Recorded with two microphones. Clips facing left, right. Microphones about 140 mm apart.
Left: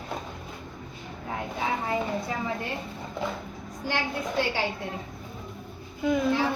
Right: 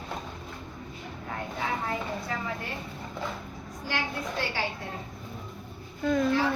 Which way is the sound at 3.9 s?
25° left (ahead or behind).